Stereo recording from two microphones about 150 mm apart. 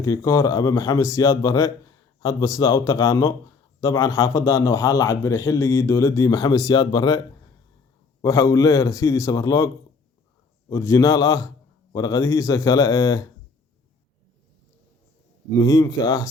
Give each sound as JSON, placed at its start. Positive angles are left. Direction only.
{"t": 0.0, "sound": "a man's voice", "side_deg": 20}
{"t": 10.7, "sound": "a man's voice", "side_deg": 20}
{"t": 15.5, "sound": "a man's voice", "side_deg": 20}